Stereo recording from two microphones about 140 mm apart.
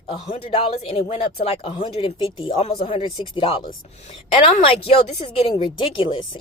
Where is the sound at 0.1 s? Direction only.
40° left (ahead or behind).